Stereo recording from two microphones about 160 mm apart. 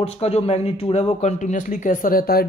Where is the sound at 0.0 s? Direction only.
40° left (ahead or behind).